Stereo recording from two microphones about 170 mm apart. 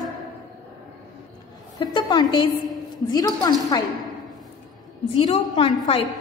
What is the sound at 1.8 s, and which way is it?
A woman's voice, 25° left (ahead or behind).